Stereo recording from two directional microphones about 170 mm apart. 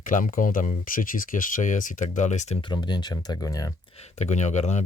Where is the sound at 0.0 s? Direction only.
50° left (ahead or behind).